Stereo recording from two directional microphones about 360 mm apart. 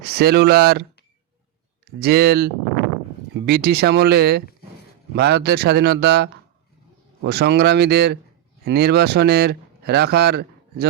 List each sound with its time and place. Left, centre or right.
0.0 s speech: right